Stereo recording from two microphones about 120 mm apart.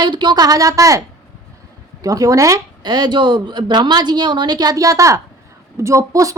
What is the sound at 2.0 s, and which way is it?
A woman's voice, 30° right (ahead or behind).